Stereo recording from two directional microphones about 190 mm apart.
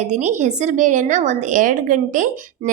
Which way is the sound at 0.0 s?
40° right (ahead or behind).